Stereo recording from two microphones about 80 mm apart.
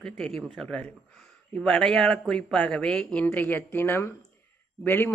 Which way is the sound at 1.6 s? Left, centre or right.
Centre.